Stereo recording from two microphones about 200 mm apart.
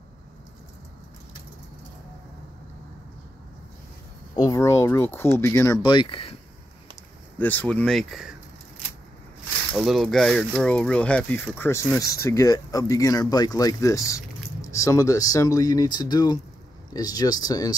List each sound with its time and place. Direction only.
4.4 s speech: 15° left (ahead or behind)
7.3 s speech: 10° left (ahead or behind)
9.7 s speech: centre (ahead or behind); by 17.7 s 20° left (ahead or behind)